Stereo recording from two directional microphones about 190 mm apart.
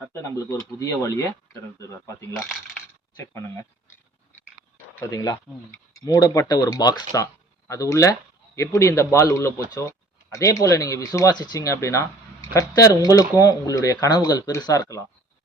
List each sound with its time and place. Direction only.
0.1 s speech: 15° left (ahead or behind)
4.9 s speech: 15° left (ahead or behind)